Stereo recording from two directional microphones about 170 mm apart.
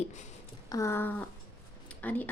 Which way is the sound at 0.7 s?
15° left (ahead or behind).